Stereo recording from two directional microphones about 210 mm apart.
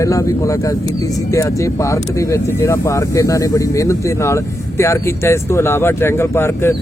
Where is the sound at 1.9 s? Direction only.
15° left (ahead or behind).